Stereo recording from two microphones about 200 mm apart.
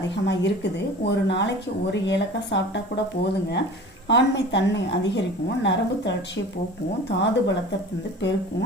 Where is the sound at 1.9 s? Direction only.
60° left (ahead or behind).